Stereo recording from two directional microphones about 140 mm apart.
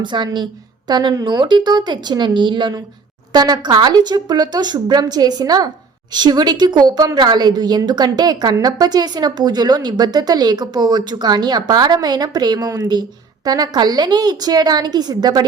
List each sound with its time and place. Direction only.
0.0 s a woman's voice: 35° right (ahead or behind)